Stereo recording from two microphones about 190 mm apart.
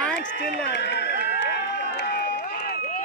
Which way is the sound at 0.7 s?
65° left (ahead or behind).